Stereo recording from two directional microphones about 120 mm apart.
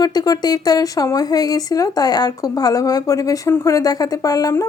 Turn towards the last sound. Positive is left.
turn(degrees=30)  # may be behind; listen again after turning